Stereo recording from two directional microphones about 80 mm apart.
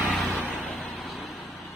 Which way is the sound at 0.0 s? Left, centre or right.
Centre.